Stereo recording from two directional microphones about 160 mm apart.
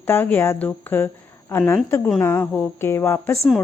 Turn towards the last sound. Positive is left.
turn(degrees=15)  # may be behind; listen again after turning